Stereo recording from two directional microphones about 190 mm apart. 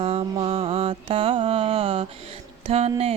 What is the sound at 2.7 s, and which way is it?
Speech, 35° right (ahead or behind).